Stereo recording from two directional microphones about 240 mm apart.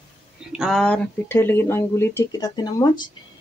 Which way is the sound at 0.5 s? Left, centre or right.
Centre.